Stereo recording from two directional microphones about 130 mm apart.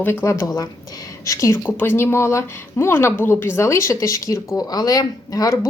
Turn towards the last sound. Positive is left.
turn(degrees=25)  # may be behind; listen again after turning